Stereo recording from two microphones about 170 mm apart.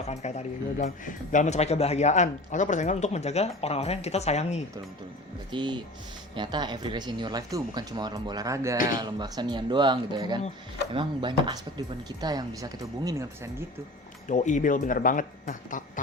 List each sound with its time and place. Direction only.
0.1 s speech: 40° left (ahead or behind)
5.5 s speech: 30° right (ahead or behind)
14.3 s speech: 45° left (ahead or behind)